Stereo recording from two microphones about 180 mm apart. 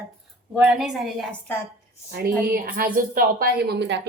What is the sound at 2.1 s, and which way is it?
A woman's voice, 60° right (ahead or behind).